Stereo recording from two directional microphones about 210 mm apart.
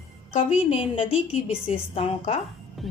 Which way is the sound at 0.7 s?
30° left (ahead or behind).